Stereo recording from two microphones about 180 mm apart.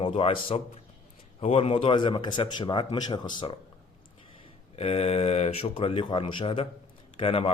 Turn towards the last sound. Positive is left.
turn(degrees=30)  # may be behind; listen again after turning